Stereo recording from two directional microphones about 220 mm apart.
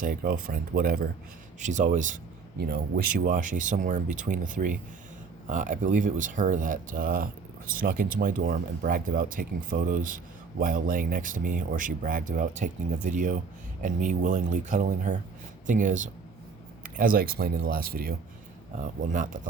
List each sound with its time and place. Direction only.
0.0 s speech: 40° right (ahead or behind)
1.5 s speech: 35° right (ahead or behind)